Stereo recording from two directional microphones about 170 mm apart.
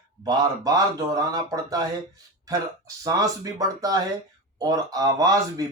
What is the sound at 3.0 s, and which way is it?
Speech, 20° right (ahead or behind).